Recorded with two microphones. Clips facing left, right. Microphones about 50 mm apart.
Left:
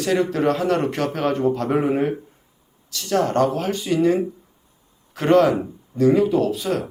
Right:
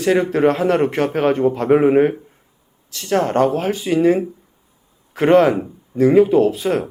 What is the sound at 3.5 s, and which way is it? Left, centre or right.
Speech, centre.